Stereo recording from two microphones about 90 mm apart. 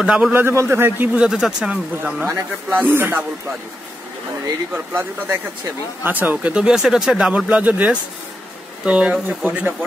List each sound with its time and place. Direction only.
0.0 s speech: 10° right (ahead or behind)
0.3 s a man's voice: 25° right (ahead or behind)
2.2 s a man's voice: 20° right (ahead or behind)
4.7 s a man's voice: 25° right (ahead or behind)